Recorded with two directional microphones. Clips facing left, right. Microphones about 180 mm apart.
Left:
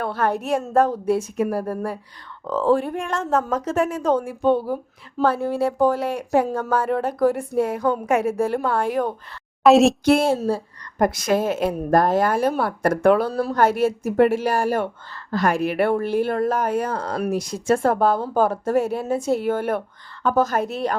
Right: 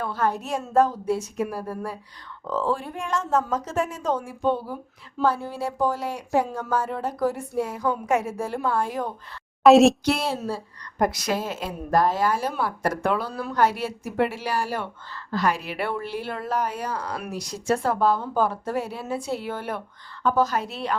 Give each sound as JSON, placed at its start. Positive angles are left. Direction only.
{"t": 0.0, "sound": "speech", "side_deg": 65}
{"t": 9.6, "sound": "a woman's voice", "side_deg": 0}
{"t": 10.1, "sound": "a woman's voice", "side_deg": 50}